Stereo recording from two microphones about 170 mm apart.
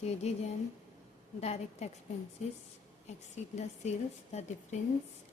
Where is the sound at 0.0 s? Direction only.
40° left (ahead or behind).